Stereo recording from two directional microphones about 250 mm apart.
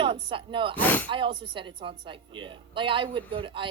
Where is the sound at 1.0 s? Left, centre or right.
Centre.